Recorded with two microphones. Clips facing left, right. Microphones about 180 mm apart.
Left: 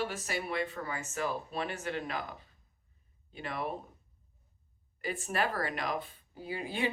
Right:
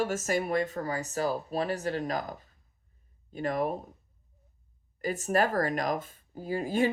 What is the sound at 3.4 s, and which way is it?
Speech, 45° right (ahead or behind).